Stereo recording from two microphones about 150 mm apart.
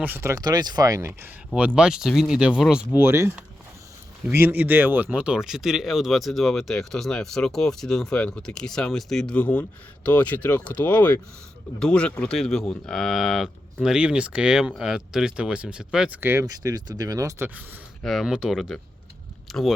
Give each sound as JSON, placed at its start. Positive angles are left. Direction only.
{"t": 0.0, "sound": "speech", "side_deg": -15}
{"t": 1.5, "sound": "speech", "side_deg": -10}
{"t": 3.0, "sound": "speech", "side_deg": -15}
{"t": 18.0, "sound": "speech", "side_deg": 0}